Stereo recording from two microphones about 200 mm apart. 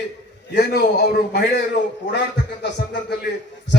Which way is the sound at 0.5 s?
50° left (ahead or behind).